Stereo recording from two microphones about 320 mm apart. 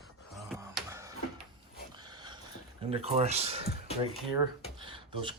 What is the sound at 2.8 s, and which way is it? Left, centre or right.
Speech, centre.